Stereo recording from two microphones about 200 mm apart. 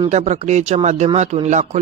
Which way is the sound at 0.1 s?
35° right (ahead or behind).